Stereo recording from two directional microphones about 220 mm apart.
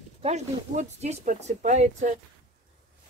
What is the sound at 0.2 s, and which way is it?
Speech, 30° right (ahead or behind).